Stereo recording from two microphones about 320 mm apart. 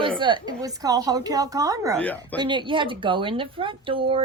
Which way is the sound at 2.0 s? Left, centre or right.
Centre.